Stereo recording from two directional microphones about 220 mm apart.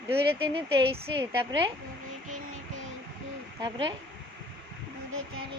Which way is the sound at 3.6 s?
20° right (ahead or behind).